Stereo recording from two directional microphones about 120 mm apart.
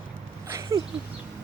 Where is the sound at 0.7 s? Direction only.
30° right (ahead or behind).